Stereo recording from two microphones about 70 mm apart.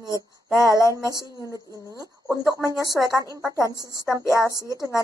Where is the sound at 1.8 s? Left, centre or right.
Left.